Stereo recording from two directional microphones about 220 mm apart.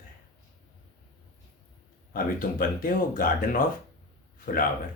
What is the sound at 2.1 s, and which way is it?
Speech, 40° left (ahead or behind).